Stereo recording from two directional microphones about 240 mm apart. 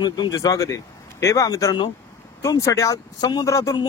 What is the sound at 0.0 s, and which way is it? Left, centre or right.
Speech, centre.